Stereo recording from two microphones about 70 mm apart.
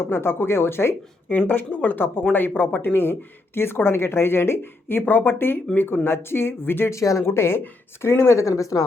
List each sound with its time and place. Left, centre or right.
0.0 s speech: left
7.0 s a woman's voice: left